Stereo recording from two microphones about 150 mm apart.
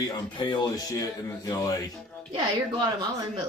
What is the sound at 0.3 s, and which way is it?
A man's voice, 30° left (ahead or behind).